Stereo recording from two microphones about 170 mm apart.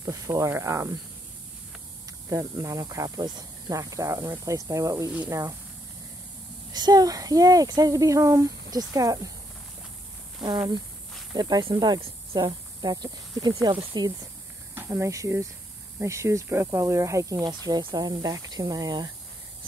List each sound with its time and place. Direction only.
0.0 s speech: 15° right (ahead or behind)
2.2 s speech: 20° right (ahead or behind)
6.7 s speech: 25° right (ahead or behind)
10.4 s speech: 25° right (ahead or behind)